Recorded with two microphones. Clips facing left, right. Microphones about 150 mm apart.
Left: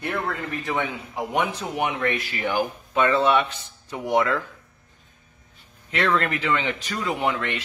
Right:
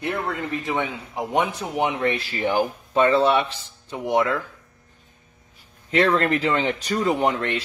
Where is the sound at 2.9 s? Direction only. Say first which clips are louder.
Right 2 dB; 35° right (ahead or behind).